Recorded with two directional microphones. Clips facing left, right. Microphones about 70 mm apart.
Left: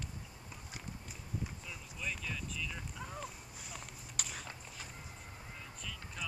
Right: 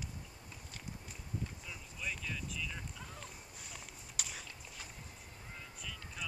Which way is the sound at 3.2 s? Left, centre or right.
Centre.